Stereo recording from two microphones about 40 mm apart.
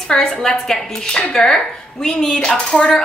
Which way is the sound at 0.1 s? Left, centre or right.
Centre.